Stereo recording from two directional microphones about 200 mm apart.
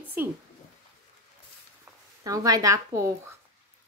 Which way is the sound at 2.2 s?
15° right (ahead or behind).